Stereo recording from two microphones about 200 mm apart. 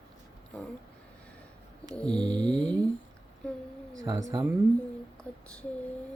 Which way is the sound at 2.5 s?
Centre (ahead or behind).